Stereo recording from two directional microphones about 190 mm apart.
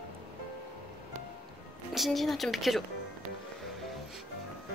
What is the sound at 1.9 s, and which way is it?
Speech, centre (ahead or behind).